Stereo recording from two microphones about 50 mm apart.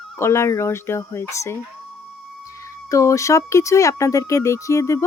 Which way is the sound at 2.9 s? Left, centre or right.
Left.